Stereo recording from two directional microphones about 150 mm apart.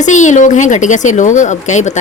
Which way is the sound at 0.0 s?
55° left (ahead or behind).